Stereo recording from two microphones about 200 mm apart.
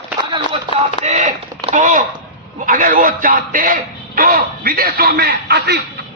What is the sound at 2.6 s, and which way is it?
A man's voice, 45° right (ahead or behind).